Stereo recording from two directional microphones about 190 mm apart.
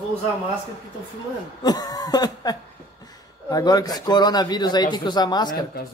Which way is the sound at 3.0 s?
20° left (ahead or behind).